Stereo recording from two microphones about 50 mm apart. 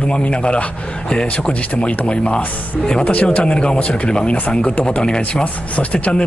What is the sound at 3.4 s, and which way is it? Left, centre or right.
Speech, centre.